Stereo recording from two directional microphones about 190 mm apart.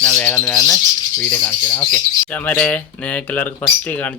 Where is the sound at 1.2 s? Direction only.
5° left (ahead or behind).